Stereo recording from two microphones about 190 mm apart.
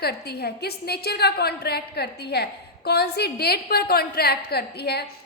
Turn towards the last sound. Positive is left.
turn(degrees=60)  # may be behind; listen again after turning